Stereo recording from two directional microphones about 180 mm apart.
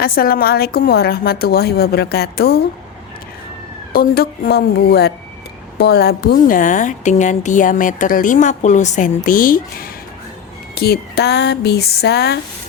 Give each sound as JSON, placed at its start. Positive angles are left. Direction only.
{"t": 0.0, "sound": "a woman's voice", "side_deg": 55}
{"t": 3.9, "sound": "a woman's voice", "side_deg": 55}
{"t": 10.8, "sound": "a woman's voice", "side_deg": 60}